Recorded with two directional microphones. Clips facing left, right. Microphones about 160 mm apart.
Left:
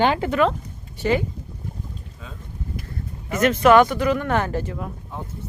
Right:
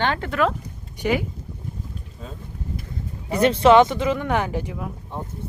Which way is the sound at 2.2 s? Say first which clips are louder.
Right 2 dB; 35° right (ahead or behind).